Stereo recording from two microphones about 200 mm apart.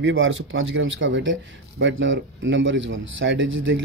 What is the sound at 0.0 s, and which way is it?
Speech, 70° right (ahead or behind).